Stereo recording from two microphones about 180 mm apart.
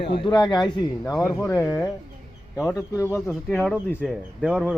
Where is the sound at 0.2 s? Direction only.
25° left (ahead or behind).